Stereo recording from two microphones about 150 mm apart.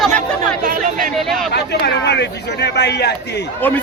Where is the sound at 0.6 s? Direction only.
60° right (ahead or behind).